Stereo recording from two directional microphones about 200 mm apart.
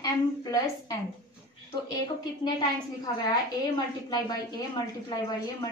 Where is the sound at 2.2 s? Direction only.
20° left (ahead or behind).